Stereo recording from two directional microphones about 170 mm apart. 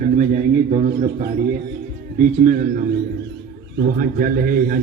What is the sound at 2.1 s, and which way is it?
Speech, 55° right (ahead or behind).